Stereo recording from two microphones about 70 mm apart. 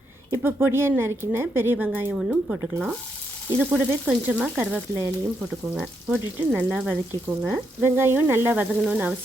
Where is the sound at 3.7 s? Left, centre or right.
Centre.